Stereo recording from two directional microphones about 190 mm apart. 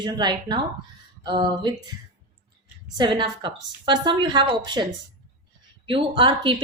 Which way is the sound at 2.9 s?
25° right (ahead or behind).